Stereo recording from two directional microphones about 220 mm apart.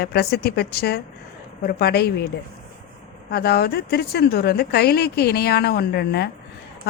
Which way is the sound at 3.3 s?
45° left (ahead or behind).